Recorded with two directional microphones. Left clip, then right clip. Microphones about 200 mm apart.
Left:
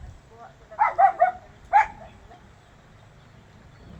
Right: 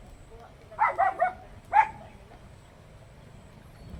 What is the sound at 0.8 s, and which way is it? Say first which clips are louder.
Dog: left 6 dB; 55° left (ahead or behind).